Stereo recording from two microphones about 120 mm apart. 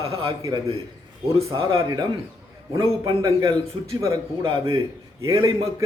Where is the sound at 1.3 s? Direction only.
50° right (ahead or behind).